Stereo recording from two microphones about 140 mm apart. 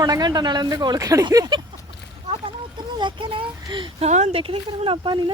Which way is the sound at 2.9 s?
35° right (ahead or behind).